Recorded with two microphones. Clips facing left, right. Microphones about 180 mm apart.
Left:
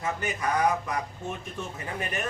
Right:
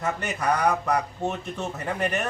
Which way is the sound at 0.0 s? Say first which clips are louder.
Right 3 dB; 70° right (ahead or behind).